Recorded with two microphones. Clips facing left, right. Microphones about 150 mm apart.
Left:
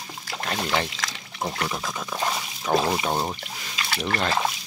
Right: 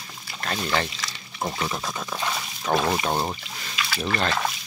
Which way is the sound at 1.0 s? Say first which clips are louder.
Left 3 dB; 90° left.